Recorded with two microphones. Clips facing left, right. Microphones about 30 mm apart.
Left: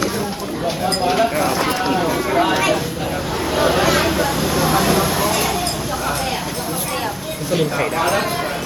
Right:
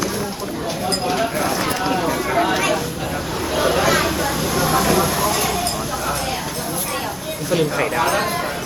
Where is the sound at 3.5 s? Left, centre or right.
Centre.